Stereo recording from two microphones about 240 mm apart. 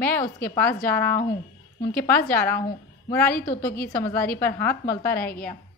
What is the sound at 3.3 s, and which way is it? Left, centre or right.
Speech, left.